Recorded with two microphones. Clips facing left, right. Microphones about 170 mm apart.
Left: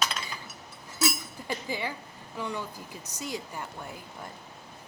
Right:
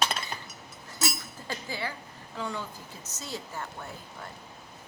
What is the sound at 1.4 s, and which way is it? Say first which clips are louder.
A woman's voice: left 2 dB; 15° left (ahead or behind).